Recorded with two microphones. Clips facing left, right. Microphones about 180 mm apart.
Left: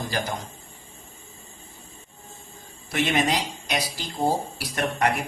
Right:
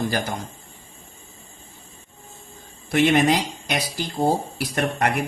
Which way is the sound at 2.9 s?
60° right (ahead or behind).